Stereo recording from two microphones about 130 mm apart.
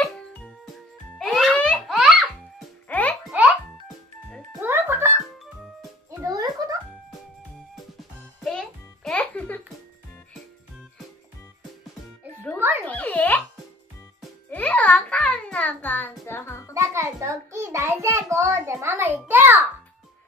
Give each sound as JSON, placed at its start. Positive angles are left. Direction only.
{"t": 0.0, "sound": "music", "side_deg": 10}
{"t": 1.9, "sound": "baby laughter", "side_deg": 0}
{"t": 2.9, "sound": "music", "side_deg": 10}
{"t": 4.6, "sound": "music", "side_deg": -15}
{"t": 6.0, "sound": "music", "side_deg": -30}
{"t": 8.5, "sound": "music", "side_deg": 5}
{"t": 12.5, "sound": "music", "side_deg": -15}
{"t": 12.8, "sound": "a sound", "side_deg": 15}
{"t": 14.5, "sound": "a sound", "side_deg": 10}
{"t": 16.7, "sound": "a sound", "side_deg": -20}